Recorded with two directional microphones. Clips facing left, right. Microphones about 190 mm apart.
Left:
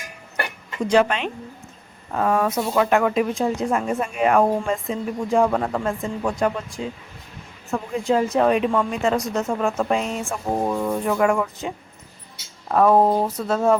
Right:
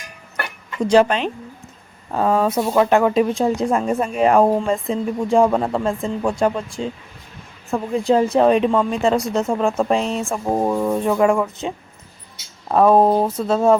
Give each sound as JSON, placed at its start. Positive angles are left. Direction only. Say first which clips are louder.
{"t": 0.9, "sound": "speech", "louder": "right 4 dB", "side_deg": -35}
{"t": 12.7, "sound": "speech", "louder": "right 3 dB", "side_deg": -20}